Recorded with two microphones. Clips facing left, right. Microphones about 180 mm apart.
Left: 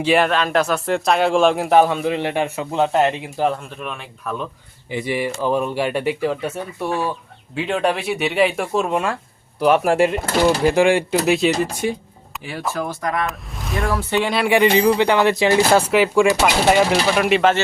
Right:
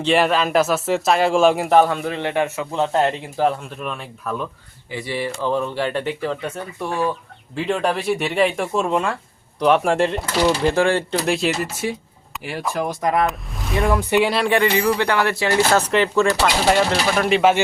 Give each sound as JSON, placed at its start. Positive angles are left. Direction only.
{"t": 0.0, "sound": "speech", "side_deg": 0}
{"t": 2.3, "sound": "a man's voice", "side_deg": 25}
{"t": 2.8, "sound": "speech", "side_deg": 10}
{"t": 4.9, "sound": "speech", "side_deg": 20}
{"t": 7.5, "sound": "speech", "side_deg": 0}
{"t": 12.7, "sound": "speech", "side_deg": -15}
{"t": 13.2, "sound": "speech", "side_deg": 0}
{"t": 14.5, "sound": "speech", "side_deg": 20}